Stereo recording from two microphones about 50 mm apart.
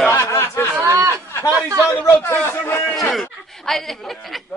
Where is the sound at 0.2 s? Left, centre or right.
Left.